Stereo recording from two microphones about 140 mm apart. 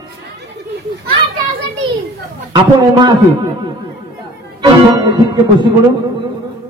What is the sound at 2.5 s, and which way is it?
A man's voice, 30° right (ahead or behind).